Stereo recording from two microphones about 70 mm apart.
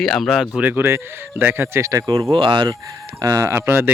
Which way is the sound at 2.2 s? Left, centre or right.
Right.